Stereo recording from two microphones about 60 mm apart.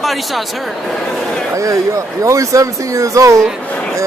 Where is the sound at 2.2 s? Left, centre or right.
Right.